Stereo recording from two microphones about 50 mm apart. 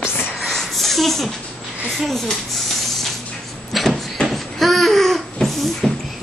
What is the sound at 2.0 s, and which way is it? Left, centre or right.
Speech, centre.